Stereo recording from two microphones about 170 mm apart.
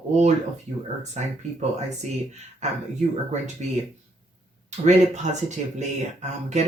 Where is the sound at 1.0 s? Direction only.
40° right (ahead or behind).